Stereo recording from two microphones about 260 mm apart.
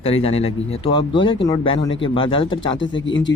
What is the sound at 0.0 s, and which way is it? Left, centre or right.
Speech, left.